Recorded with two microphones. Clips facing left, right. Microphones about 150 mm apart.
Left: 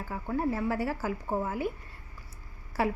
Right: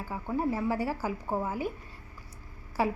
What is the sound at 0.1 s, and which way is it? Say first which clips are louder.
A woman's voice: even; 15° right (ahead or behind).